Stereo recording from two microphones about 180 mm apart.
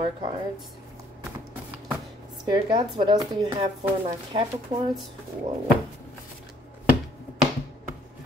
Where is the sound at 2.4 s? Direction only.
25° right (ahead or behind).